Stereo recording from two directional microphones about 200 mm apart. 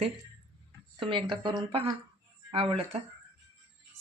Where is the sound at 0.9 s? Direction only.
25° right (ahead or behind).